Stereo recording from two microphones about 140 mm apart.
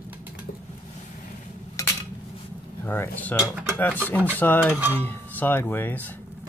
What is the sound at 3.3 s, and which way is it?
Speech, 10° right (ahead or behind).